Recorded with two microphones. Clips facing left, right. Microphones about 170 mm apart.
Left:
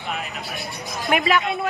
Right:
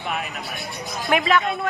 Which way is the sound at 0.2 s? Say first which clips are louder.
Even; centre (ahead or behind).